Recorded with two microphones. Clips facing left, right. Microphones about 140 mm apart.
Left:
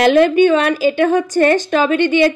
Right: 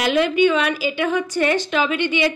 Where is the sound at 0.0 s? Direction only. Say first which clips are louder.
Left 6 dB; 50° left (ahead or behind).